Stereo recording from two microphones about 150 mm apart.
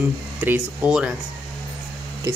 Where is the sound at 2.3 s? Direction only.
20° right (ahead or behind).